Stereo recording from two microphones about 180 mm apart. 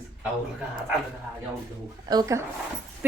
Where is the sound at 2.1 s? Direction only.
20° right (ahead or behind).